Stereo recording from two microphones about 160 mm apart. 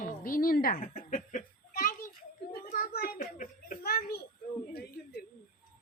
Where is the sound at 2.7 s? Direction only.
65° left (ahead or behind).